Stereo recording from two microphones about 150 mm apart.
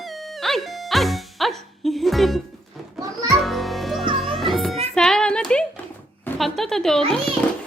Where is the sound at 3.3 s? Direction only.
Centre (ahead or behind).